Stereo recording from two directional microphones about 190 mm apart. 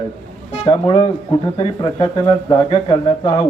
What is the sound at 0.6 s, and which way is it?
A man's voice, 30° left (ahead or behind).